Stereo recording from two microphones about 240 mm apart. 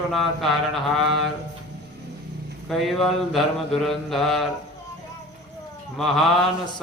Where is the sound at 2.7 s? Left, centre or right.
Centre.